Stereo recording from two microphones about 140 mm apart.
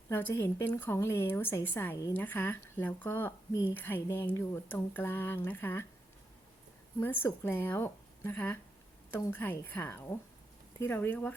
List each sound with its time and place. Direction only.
0.1 s speech: 15° left (ahead or behind)
7.0 s speech: 15° left (ahead or behind)